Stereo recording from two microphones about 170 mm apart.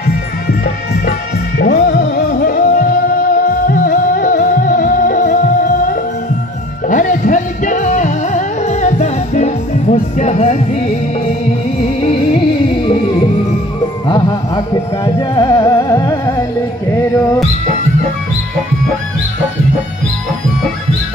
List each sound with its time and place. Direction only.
1.6 s music: 55° left (ahead or behind); by 12.9 s 30° left (ahead or behind)
14.0 s music: 25° left (ahead or behind)